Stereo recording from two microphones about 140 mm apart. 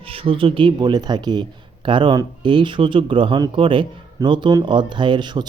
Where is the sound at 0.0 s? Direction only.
40° right (ahead or behind).